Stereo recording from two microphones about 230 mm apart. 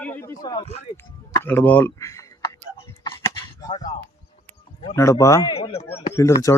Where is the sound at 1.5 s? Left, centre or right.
Centre.